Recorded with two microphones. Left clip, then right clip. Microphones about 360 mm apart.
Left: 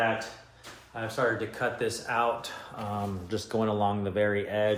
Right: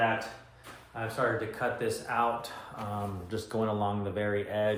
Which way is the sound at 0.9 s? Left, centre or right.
Left.